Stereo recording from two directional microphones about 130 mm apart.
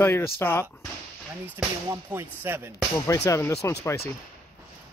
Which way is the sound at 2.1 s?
15° right (ahead or behind).